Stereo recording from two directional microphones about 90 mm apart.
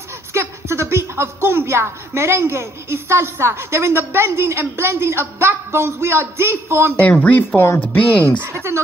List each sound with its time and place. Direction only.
0.3 s speech: 25° right (ahead or behind)
7.0 s speech: 15° left (ahead or behind)
7.6 s speech: 30° left (ahead or behind)
7.9 s speech: 15° left (ahead or behind)
8.4 s speech: 20° right (ahead or behind)